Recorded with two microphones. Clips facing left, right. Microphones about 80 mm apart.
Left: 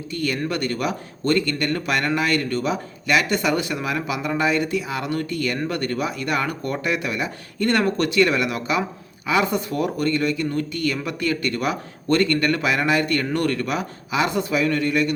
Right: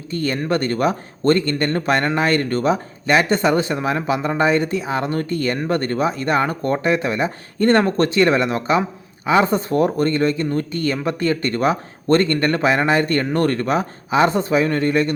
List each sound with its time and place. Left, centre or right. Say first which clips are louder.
0.1 s speech: right 4 dB; right